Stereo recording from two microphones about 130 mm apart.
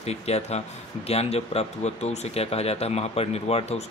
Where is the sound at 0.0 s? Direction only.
55° left (ahead or behind).